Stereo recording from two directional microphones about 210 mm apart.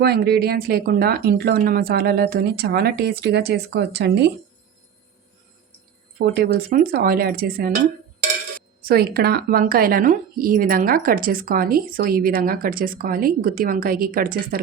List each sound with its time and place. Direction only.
0.0 s speech: 50° right (ahead or behind)
6.2 s speech: 50° right (ahead or behind)
8.8 s speech: 45° right (ahead or behind)